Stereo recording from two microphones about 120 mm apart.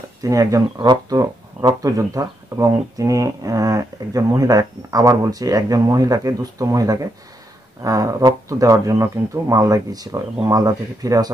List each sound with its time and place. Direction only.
0.2 s speech: 30° right (ahead or behind)